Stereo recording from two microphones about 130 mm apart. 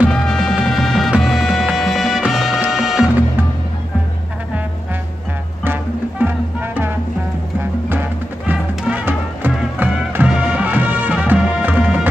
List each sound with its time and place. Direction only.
0.1 s music: 5° left (ahead or behind)
5.6 s music: 15° right (ahead or behind)
7.9 s music: 15° right (ahead or behind)